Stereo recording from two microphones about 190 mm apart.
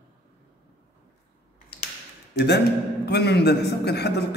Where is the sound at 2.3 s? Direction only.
60° left (ahead or behind).